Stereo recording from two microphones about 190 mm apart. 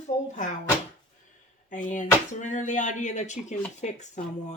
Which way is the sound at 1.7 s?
40° left (ahead or behind).